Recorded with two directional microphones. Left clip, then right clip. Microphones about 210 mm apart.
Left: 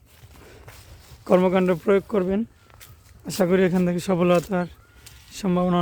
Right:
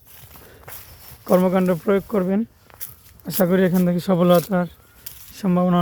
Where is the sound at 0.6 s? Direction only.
40° right (ahead or behind).